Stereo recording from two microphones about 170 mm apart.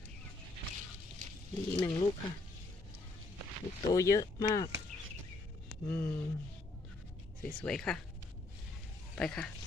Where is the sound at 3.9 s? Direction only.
20° left (ahead or behind).